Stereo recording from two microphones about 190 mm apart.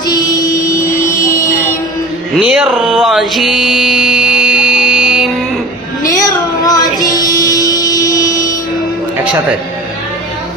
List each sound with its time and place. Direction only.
0.0 s music: 20° left (ahead or behind)
2.4 s music: 5° right (ahead or behind)
6.1 s music: 20° left (ahead or behind)